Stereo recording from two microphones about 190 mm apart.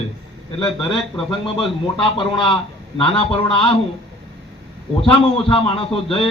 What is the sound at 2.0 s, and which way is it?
A man's voice, 25° left (ahead or behind).